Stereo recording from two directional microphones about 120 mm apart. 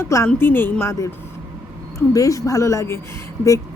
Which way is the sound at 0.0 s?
25° left (ahead or behind).